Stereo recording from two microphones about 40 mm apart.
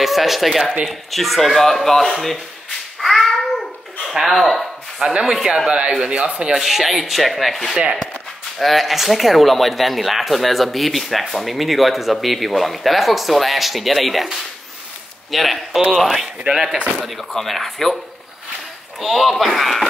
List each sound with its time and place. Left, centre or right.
0.0 s speech: centre
3.0 s a sound: centre
5.2 s speech: centre
5.7 s speech: right
6.5 s speech: centre
15.3 s speech: centre
18.9 s speech: centre